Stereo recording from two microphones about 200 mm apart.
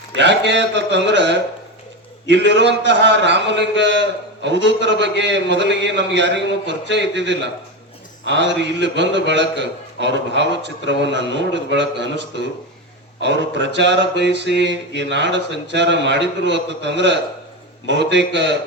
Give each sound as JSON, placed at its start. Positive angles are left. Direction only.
{"t": 0.1, "sound": "a man's voice", "side_deg": -60}
{"t": 13.2, "sound": "a man's voice", "side_deg": -60}